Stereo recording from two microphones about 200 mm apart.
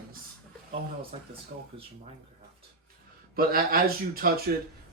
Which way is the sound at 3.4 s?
45° right (ahead or behind).